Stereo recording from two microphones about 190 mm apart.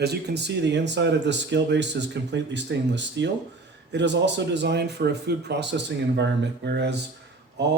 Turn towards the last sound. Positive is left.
turn(degrees=-65)  # may be behind; listen again after turning